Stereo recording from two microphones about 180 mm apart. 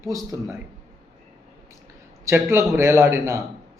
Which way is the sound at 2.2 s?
15° right (ahead or behind).